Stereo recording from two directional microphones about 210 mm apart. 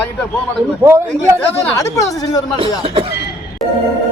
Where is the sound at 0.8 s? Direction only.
10° right (ahead or behind).